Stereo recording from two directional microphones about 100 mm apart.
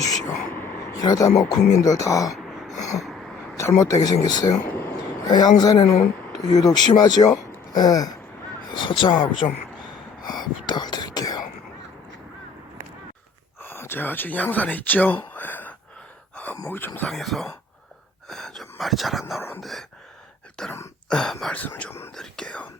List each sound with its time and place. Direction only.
0.9 s speech: 40° left (ahead or behind)
2.3 s throat clearing: centre (ahead or behind)
3.6 s speech: 30° left (ahead or behind)
8.7 s speech: 55° left (ahead or behind)
10.2 s whispering: 45° left (ahead or behind)
13.6 s speech: 25° left (ahead or behind)
16.3 s a sound: 15° left (ahead or behind)
16.6 s speech: 20° left (ahead or behind)
17.1 s speech: centre (ahead or behind)
20.6 s speech: 10° left (ahead or behind)
21.5 s speech: 15° left (ahead or behind)
22.1 s whispering: 5° left (ahead or behind)